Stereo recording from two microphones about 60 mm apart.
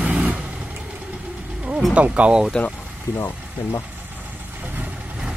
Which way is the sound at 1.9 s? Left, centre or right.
Right.